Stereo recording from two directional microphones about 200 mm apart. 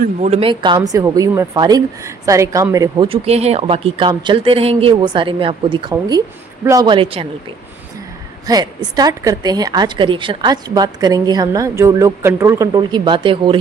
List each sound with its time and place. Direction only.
0.0 s speech: 35° right (ahead or behind)
8.4 s speech: 20° right (ahead or behind)